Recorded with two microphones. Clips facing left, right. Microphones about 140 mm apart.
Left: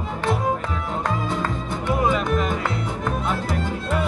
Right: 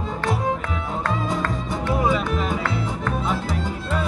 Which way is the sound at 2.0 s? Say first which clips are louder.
Left 2 dB; 5° right (ahead or behind).